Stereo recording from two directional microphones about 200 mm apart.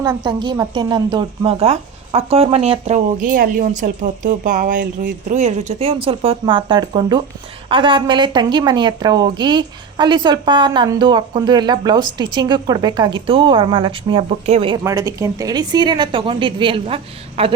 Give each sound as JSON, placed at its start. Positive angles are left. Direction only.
{"t": 0.0, "sound": "speech", "side_deg": -20}
{"t": 3.2, "sound": "speech", "side_deg": -45}
{"t": 14.8, "sound": "speech", "side_deg": -15}